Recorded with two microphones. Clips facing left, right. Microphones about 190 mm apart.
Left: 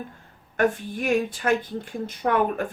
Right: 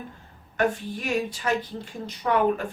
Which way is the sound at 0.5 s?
50° left (ahead or behind).